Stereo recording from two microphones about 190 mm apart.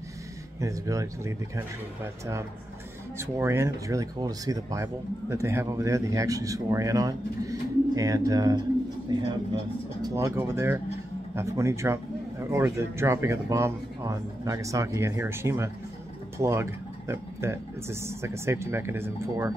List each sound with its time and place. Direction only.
0.6 s speech: 15° right (ahead or behind)
3.2 s a man's voice: 15° right (ahead or behind)